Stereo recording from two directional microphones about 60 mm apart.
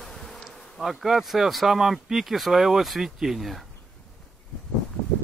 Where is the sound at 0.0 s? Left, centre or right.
Centre.